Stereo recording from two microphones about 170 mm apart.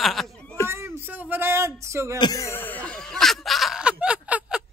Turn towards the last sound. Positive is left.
turn(degrees=-5)  # may be behind; listen again after turning